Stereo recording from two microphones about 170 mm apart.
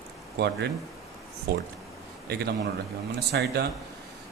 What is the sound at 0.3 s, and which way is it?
Speech, 75° right (ahead or behind).